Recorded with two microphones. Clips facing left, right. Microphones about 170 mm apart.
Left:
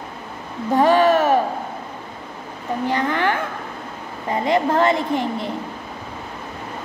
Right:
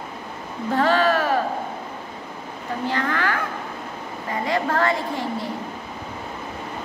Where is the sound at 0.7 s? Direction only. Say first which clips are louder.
Left 5 dB; 15° left (ahead or behind).